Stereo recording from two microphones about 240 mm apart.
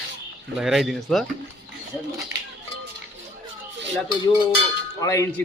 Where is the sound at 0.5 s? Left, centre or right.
Centre.